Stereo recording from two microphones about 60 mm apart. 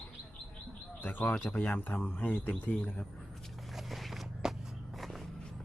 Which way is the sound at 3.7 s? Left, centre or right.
Centre.